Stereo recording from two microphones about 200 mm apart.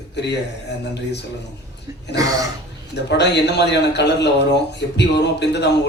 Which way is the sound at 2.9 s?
60° left (ahead or behind).